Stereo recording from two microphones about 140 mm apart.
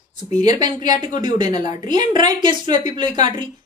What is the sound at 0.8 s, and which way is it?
A woman's voice, 30° right (ahead or behind).